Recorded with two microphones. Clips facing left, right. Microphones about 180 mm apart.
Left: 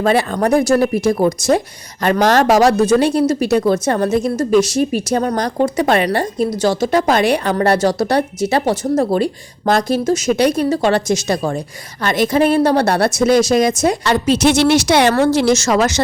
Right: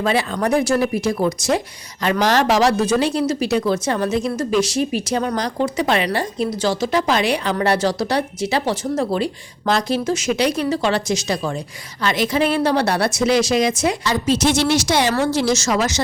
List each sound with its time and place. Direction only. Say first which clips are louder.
0.0 s speech: left 4 dB; 50° left (ahead or behind)
14.0 s a woman's voice: left 5 dB; 65° left (ahead or behind)